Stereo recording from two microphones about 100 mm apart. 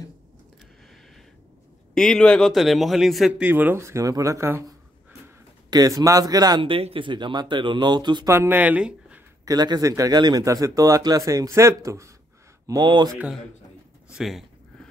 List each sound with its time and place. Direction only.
2.0 s a man's voice: 5° left (ahead or behind)
3.3 s speech: 20° right (ahead or behind)
5.7 s a man's voice: 40° right (ahead or behind)
6.6 s speech: 65° right (ahead or behind); by 8.3 s 45° right (ahead or behind)
8.3 s speech: 25° right (ahead or behind)
9.4 s a man's voice: 40° right (ahead or behind)
12.6 s speech: 45° right (ahead or behind)
14.1 s a man's voice: 5° right (ahead or behind)